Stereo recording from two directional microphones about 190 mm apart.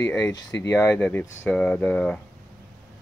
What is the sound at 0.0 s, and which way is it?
Speech, 15° left (ahead or behind).